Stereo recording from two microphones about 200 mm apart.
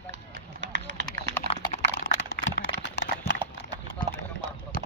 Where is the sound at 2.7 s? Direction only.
65° left (ahead or behind).